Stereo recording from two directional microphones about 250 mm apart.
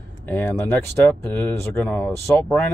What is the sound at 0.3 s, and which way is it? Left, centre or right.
Speech, centre.